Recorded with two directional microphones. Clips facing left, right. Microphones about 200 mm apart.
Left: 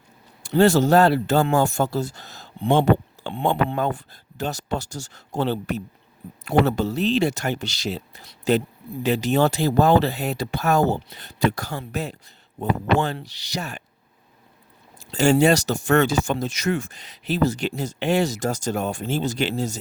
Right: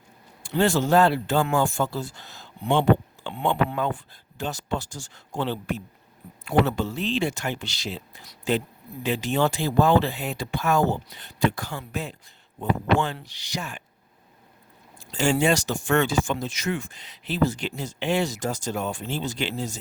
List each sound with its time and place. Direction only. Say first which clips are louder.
0.4 s speech: left 5 dB; 40° left (ahead or behind)
15.1 s speech: left 5 dB; 40° left (ahead or behind)